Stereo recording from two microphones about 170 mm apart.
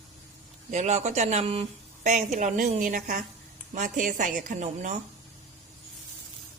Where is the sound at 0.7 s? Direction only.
45° right (ahead or behind).